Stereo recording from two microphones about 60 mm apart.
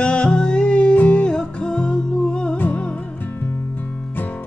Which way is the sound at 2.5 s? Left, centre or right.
Left.